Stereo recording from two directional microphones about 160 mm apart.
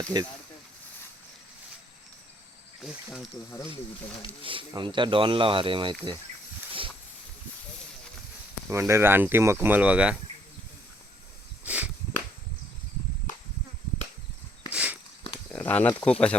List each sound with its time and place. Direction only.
0.0 s speech: 25° right (ahead or behind)
2.8 s speech: centre (ahead or behind)
4.4 s speech: 30° right (ahead or behind)
8.7 s speech: 15° right (ahead or behind)
11.6 s a sound: 10° right (ahead or behind)
14.7 s walk: 5° right (ahead or behind)
15.5 s speech: 10° left (ahead or behind)